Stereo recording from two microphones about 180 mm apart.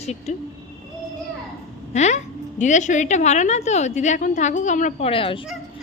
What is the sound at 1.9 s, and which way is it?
A woman's voice, 40° left (ahead or behind).